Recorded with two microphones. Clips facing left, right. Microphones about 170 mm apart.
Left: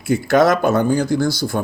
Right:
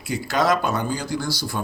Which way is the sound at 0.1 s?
50° left (ahead or behind).